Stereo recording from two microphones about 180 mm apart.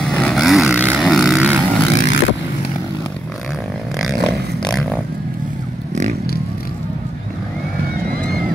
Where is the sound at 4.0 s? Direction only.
Centre (ahead or behind).